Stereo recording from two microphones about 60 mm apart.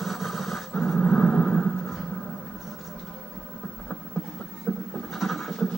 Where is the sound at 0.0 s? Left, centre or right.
Centre.